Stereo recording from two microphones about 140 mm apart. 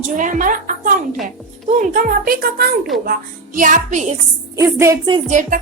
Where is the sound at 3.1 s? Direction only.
70° right (ahead or behind).